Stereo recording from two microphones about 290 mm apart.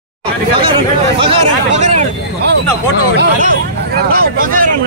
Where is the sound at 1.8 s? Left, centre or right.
Right.